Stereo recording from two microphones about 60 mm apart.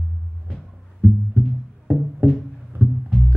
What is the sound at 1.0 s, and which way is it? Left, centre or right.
Music, right.